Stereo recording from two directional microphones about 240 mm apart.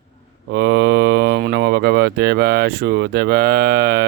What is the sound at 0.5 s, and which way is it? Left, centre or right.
Speech, right.